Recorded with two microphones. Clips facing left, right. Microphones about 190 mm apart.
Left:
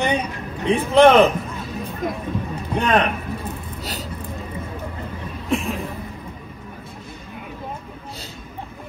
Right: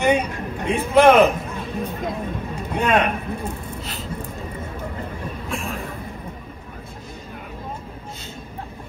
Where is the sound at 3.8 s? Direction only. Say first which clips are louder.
Left 2 dB; 40° left (ahead or behind).